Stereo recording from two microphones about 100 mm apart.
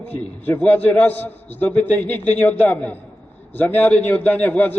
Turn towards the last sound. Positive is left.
turn(degrees=15)  # may be behind; listen again after turning